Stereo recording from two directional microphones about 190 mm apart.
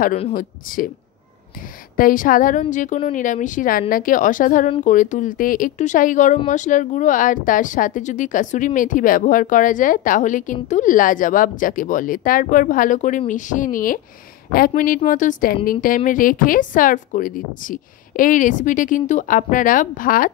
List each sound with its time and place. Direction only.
0.3 s speech: 45° left (ahead or behind)
2.0 s speech: 45° left (ahead or behind)